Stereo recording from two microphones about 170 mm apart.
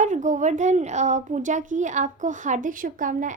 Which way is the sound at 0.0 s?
45° right (ahead or behind).